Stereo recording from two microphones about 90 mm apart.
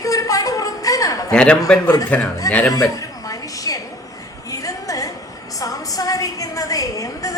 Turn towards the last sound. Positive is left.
turn(degrees=40)  # may be behind; listen again after turning